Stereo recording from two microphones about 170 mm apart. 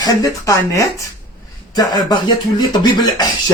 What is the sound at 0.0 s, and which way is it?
Speech, 20° left (ahead or behind).